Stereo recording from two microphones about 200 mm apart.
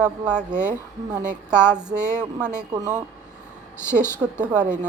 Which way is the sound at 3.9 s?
10° left (ahead or behind).